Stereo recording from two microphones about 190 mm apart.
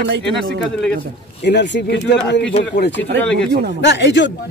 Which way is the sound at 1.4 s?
65° left (ahead or behind).